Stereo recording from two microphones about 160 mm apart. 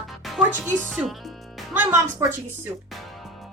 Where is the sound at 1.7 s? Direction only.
15° right (ahead or behind).